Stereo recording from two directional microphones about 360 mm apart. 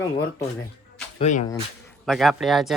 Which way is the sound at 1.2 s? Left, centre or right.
Centre.